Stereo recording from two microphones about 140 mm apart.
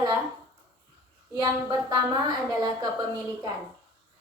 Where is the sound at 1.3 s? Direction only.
25° right (ahead or behind).